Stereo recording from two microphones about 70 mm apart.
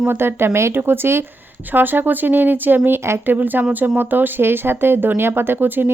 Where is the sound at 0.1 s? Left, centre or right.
Right.